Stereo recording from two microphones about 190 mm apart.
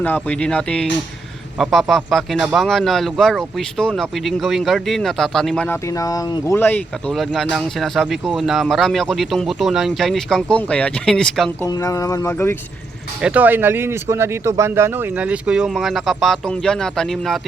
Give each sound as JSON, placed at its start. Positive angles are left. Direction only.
{"t": 0.0, "sound": "a man's voice", "side_deg": 10}
{"t": 11.6, "sound": "speech", "side_deg": 15}
{"t": 13.2, "sound": "speech", "side_deg": -10}